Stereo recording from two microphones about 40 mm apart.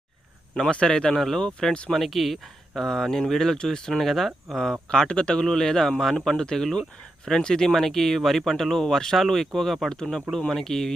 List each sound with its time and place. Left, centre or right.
0.7 s speech: left
1.9 s speech: centre
4.0 s speech: centre
4.9 s speech: left
10.0 s speech: centre